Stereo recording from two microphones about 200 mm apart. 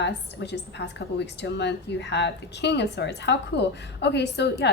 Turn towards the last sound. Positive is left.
turn(degrees=60)  # may be behind; listen again after turning